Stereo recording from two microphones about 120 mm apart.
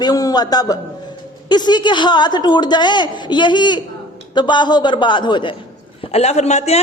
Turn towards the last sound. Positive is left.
turn(degrees=65)  # may be behind; listen again after turning